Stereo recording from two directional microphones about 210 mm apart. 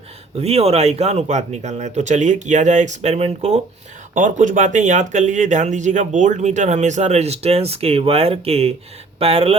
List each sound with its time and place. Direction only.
0.3 s speech: 30° right (ahead or behind)